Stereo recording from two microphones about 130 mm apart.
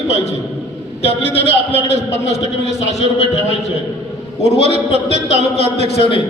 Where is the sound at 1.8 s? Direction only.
55° left (ahead or behind).